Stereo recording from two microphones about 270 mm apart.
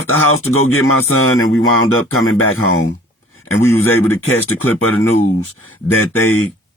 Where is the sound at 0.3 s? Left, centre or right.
Left.